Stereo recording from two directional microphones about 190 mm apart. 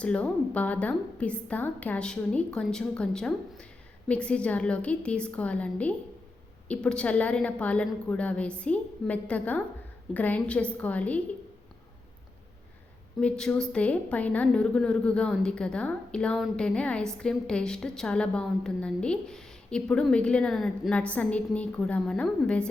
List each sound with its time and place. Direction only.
0.0 s a woman's voice: 5° left (ahead or behind)
13.1 s a woman's voice: 5° left (ahead or behind)